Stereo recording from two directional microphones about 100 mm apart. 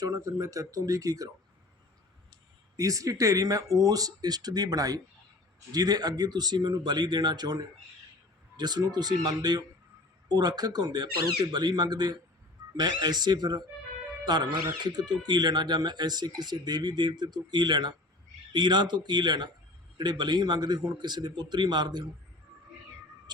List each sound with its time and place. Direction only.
0.0 s speech: 35° right (ahead or behind)
2.7 s speech: 35° right (ahead or behind)